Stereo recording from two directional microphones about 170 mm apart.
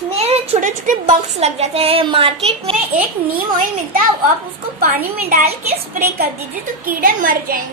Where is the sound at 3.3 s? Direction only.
55° right (ahead or behind).